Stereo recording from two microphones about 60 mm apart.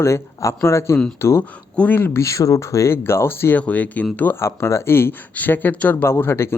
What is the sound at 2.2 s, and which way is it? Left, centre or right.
Speech, left.